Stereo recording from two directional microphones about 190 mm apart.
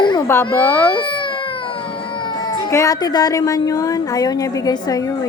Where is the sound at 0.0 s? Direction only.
25° left (ahead or behind).